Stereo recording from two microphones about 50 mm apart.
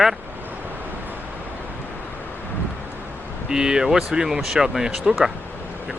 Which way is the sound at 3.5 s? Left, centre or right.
Centre.